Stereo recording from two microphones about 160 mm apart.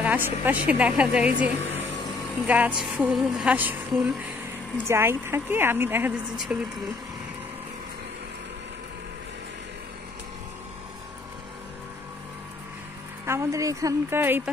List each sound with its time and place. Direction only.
0.0 s a woman's voice: 10° right (ahead or behind)
13.2 s a woman's voice: 15° right (ahead or behind)